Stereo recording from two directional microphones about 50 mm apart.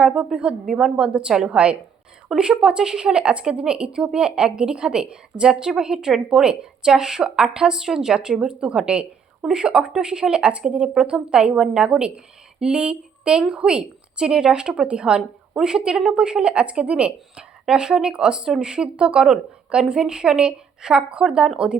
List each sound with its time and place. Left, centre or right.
0.0 s a woman's voice: centre
0.9 s a woman's voice: centre